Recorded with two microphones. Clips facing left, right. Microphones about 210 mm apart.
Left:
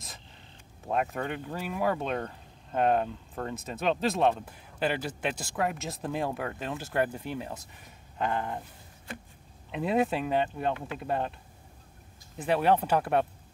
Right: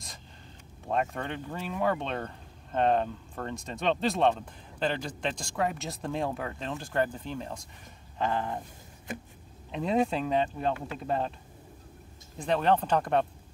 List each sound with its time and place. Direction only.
0.8 s speech: 5° left (ahead or behind)
9.7 s speech: 5° left (ahead or behind)
12.4 s speech: 10° left (ahead or behind)